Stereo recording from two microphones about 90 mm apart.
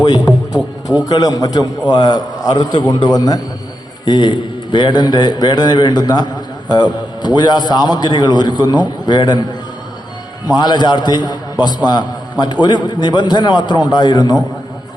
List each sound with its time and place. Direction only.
0.0 s a man's voice: 50° left (ahead or behind)
4.0 s a man's voice: 55° left (ahead or behind)